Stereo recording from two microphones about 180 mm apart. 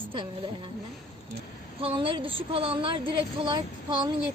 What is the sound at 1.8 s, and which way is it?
Speech, 30° right (ahead or behind).